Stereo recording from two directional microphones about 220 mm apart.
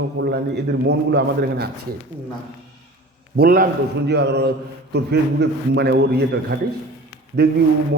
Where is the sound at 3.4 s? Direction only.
45° right (ahead or behind).